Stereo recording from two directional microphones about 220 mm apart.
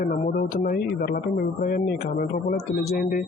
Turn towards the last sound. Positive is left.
turn(degrees=40)  # may be behind; listen again after turning